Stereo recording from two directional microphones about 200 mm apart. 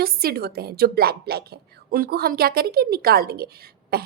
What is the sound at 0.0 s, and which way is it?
A woman's voice, 50° right (ahead or behind).